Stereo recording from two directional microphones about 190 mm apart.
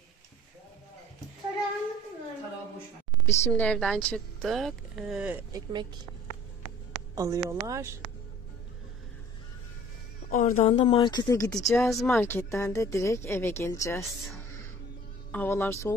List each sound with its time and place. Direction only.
3.3 s speech: 10° left (ahead or behind)
5.5 s speech: 20° right (ahead or behind)
7.2 s speech: 15° right (ahead or behind)
10.3 s speech: 45° left (ahead or behind)
10.7 s speech: 25° left (ahead or behind)
11.6 s speech: 5° left (ahead or behind)
15.3 s speech: 10° left (ahead or behind)